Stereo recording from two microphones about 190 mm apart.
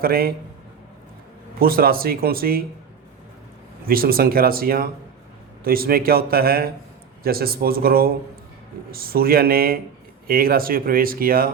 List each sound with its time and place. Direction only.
0.0 s speech: 50° right (ahead or behind)
1.5 s speech: 50° right (ahead or behind)
3.8 s speech: 50° right (ahead or behind)